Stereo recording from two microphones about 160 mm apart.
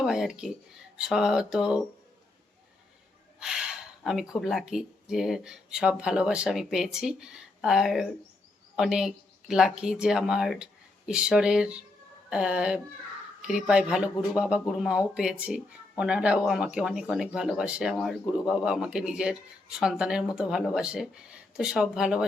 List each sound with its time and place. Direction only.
0.0 s speech: 5° right (ahead or behind)
3.4 s speech: 5° right (ahead or behind)